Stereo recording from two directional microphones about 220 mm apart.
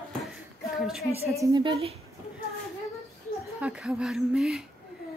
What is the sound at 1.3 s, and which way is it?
Speech, 15° right (ahead or behind).